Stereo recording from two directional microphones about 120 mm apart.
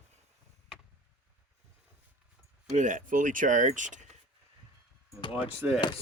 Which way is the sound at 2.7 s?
90° right.